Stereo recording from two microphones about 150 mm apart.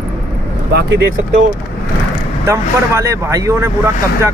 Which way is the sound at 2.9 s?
20° right (ahead or behind).